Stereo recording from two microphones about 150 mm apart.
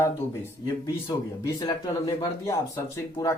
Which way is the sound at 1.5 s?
25° left (ahead or behind).